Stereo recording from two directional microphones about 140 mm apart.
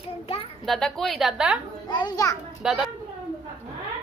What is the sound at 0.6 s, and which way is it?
A woman's voice, centre (ahead or behind).